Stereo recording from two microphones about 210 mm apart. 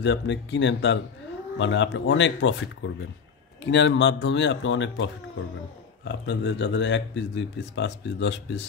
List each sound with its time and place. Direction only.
0.0 s speech: 60° left (ahead or behind)